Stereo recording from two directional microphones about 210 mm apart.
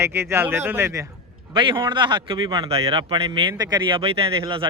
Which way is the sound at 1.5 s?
25° right (ahead or behind).